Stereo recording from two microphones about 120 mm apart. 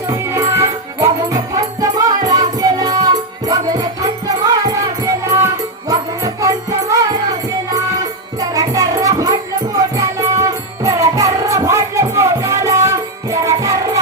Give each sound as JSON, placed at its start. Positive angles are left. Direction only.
{"t": 0.1, "sound": "music", "side_deg": -25}